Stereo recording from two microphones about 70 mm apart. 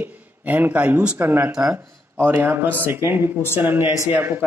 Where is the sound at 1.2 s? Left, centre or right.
Right.